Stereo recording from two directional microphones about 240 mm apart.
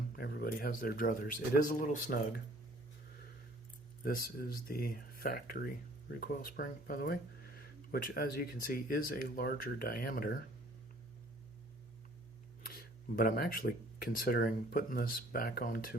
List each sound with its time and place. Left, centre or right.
0.2 s speech: left
4.0 s speech: left
12.6 s speech: left